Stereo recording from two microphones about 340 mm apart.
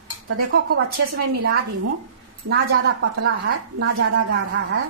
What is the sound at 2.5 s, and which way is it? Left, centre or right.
A woman's voice, right.